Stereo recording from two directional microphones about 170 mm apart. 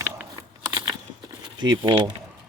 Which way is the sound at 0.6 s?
20° right (ahead or behind).